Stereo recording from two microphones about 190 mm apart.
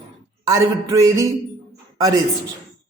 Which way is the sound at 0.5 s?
15° right (ahead or behind).